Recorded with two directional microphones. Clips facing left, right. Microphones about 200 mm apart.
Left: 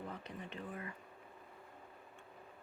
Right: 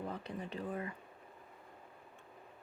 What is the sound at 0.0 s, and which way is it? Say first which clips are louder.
Speech: right 5 dB; 35° right (ahead or behind).